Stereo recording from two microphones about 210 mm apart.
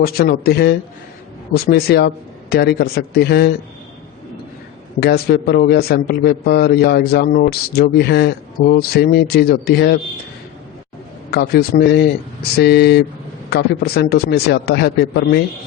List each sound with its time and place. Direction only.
0.0 s a man's voice: 45° left (ahead or behind)
4.9 s a man's voice: 50° left (ahead or behind)
11.3 s a man's voice: 50° left (ahead or behind)